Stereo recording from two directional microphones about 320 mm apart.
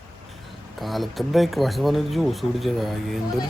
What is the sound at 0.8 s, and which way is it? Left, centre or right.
Speech, centre.